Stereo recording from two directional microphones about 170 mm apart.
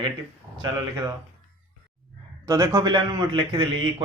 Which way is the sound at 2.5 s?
20° right (ahead or behind).